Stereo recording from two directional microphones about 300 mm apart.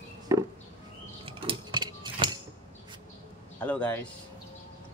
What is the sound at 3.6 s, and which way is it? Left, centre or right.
Speech, centre.